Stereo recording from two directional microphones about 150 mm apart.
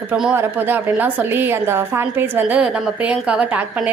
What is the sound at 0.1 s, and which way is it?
A woman's voice, 10° right (ahead or behind).